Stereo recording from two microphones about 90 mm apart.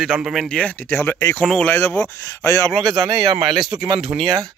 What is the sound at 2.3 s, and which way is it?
Speech, 35° left (ahead or behind).